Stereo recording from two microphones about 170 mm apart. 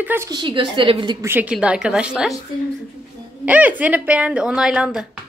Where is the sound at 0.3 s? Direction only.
25° right (ahead or behind).